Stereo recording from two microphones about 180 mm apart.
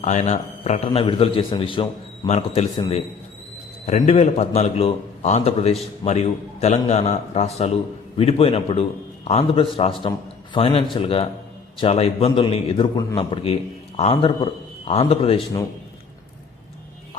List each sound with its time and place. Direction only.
0.0 s a man's voice: 40° left (ahead or behind)